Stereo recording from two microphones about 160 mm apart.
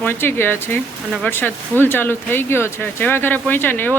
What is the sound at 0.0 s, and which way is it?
Speech, 15° left (ahead or behind).